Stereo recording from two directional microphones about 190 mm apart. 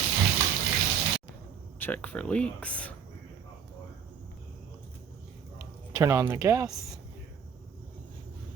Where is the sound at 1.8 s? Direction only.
10° left (ahead or behind).